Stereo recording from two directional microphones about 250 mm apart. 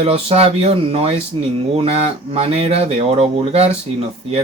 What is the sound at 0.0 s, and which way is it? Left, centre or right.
Speech, right.